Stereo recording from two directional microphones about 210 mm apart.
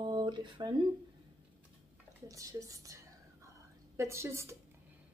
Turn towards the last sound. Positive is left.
turn(degrees=-15)  # may be behind; listen again after turning